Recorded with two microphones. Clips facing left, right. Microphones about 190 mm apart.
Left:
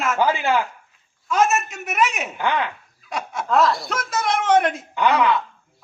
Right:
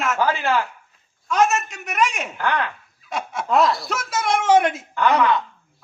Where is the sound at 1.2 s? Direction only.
Centre (ahead or behind).